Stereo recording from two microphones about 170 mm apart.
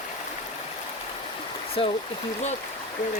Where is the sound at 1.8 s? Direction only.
30° left (ahead or behind).